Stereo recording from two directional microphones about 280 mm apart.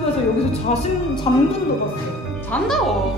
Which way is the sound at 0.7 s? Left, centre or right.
Left.